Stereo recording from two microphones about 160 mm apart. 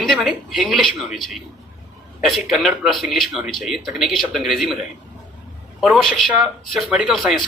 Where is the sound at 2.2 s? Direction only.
Centre (ahead or behind).